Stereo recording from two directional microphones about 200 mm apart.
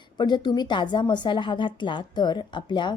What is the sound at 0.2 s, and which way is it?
A woman's voice, 20° left (ahead or behind).